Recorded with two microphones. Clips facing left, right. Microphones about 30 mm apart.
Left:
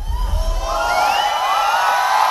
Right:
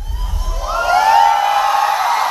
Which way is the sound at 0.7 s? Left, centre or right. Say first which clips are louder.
Right 4 dB; centre.